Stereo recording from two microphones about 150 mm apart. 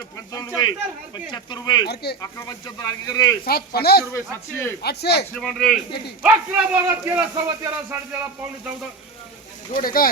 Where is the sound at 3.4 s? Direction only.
90° left.